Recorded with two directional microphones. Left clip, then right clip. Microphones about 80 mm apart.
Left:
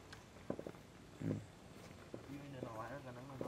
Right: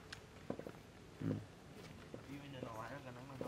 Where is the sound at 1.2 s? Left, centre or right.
Centre.